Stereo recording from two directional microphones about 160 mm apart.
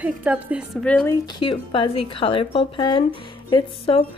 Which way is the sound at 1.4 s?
35° left (ahead or behind).